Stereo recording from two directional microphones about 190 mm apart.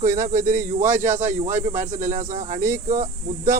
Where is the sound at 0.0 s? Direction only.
45° right (ahead or behind).